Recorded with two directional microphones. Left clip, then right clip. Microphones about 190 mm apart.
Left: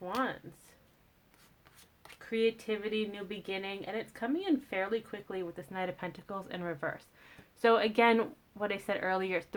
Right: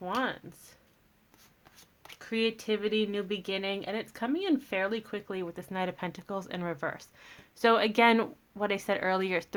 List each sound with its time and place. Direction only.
2.1 s speech: 40° right (ahead or behind)